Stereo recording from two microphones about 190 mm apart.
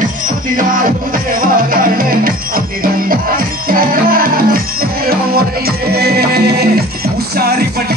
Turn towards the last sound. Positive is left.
turn(degrees=-55)  # may be behind; listen again after turning